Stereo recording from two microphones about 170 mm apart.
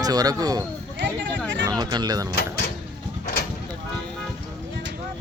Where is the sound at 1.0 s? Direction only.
90° right.